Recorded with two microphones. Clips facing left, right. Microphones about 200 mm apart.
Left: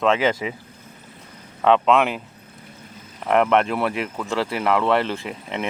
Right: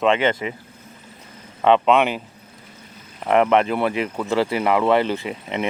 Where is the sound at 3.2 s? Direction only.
Centre (ahead or behind).